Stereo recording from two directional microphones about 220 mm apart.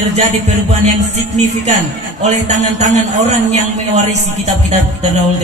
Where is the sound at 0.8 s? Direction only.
30° right (ahead or behind).